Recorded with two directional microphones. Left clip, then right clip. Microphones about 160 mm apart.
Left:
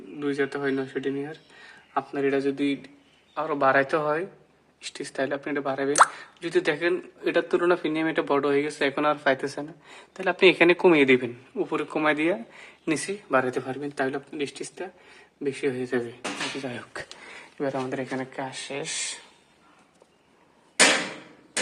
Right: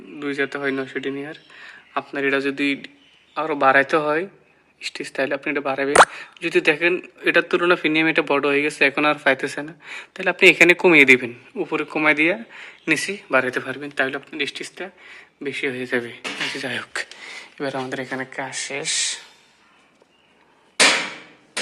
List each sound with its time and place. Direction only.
0.2 s a man's voice: 10° right (ahead or behind)